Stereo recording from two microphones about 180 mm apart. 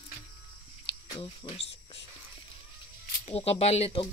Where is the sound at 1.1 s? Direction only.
25° left (ahead or behind).